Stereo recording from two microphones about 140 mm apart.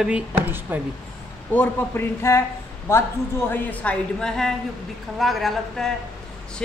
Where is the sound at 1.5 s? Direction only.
20° left (ahead or behind).